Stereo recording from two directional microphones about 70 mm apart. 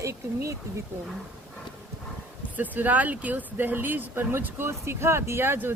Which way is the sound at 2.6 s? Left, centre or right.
Right.